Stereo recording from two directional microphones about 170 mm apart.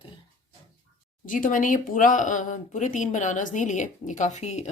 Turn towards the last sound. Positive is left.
turn(degrees=40)  # may be behind; listen again after turning